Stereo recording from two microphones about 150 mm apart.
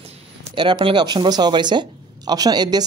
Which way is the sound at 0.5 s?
30° right (ahead or behind).